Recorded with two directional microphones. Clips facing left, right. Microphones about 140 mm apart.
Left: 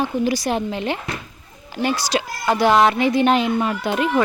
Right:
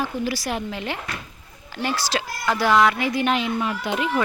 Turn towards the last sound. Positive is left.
turn(degrees=50)  # may be behind; listen again after turning